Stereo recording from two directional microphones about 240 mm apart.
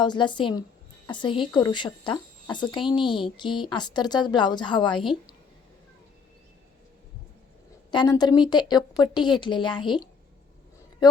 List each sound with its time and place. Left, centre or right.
0.0 s a woman's voice: centre
7.9 s a woman's voice: centre